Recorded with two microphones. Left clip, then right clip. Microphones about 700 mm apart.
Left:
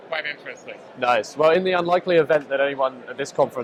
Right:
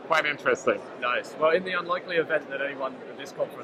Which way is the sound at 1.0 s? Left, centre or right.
Left.